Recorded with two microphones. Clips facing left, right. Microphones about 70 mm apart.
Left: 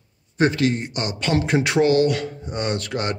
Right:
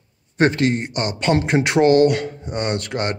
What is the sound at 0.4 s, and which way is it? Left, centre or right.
A man's voice, right.